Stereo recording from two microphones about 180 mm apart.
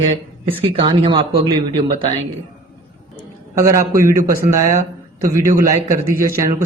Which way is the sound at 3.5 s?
15° right (ahead or behind).